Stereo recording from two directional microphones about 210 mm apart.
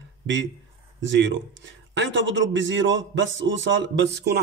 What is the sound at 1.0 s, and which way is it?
Speech, 60° right (ahead or behind).